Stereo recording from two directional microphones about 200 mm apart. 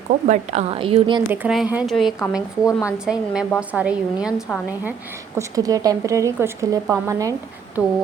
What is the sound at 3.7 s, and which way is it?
Speech, 5° right (ahead or behind).